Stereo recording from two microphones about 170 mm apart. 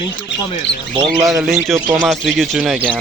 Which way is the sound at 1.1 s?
Centre (ahead or behind).